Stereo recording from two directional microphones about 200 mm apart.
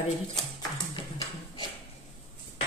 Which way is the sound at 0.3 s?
20° left (ahead or behind).